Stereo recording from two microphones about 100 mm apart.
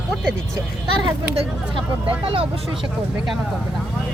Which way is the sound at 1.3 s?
60° right (ahead or behind).